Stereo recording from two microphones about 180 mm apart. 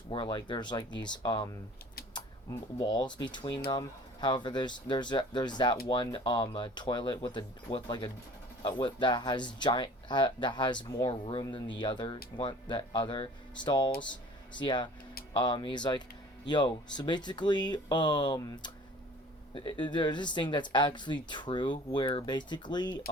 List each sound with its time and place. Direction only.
0.1 s speech: 25° left (ahead or behind)